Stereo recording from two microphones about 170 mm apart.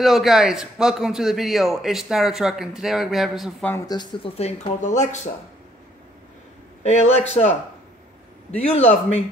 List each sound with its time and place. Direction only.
0.0 s a man's voice: centre (ahead or behind)
3.6 s speech: 20° left (ahead or behind)
4.4 s speech: 40° left (ahead or behind)
6.8 s a man's voice: 40° left (ahead or behind)